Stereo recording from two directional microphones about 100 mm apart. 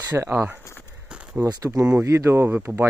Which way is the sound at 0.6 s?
25° left (ahead or behind).